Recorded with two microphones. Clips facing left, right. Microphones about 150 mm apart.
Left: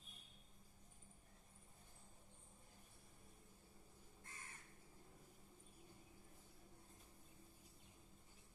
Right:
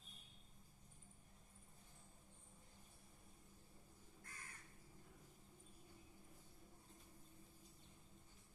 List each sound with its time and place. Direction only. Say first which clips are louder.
4.2 s crow: even; 25° left (ahead or behind)